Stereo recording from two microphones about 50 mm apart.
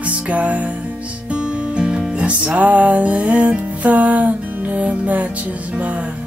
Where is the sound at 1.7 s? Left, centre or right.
Centre.